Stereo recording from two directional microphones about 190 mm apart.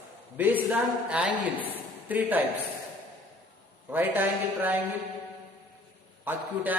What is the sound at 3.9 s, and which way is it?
Speech, 10° right (ahead or behind).